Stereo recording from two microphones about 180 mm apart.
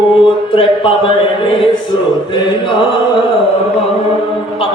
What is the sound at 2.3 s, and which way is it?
Mantra, 25° left (ahead or behind).